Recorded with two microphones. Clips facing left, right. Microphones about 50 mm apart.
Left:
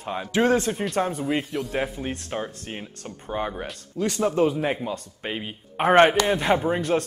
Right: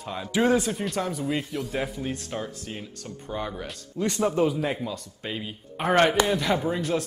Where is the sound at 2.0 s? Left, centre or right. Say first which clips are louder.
Left 2 dB; left.